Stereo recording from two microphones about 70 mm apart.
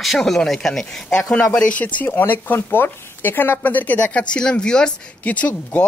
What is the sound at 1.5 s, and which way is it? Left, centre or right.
Speech, centre.